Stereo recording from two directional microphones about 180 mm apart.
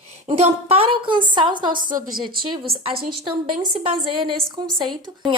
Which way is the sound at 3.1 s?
30° right (ahead or behind).